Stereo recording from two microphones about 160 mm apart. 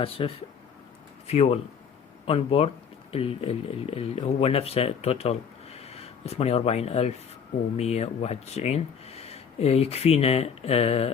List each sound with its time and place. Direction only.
0.0 s speech: 35° left (ahead or behind)